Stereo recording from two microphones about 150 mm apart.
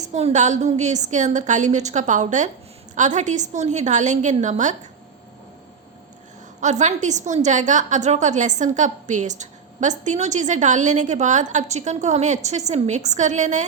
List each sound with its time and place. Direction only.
0.0 s a woman's voice: 45° right (ahead or behind)
6.6 s a woman's voice: 50° right (ahead or behind)